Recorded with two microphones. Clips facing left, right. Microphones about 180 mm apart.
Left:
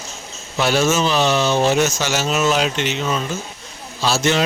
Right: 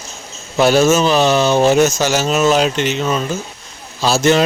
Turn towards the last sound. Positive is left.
turn(degrees=-45)  # may be behind; listen again after turning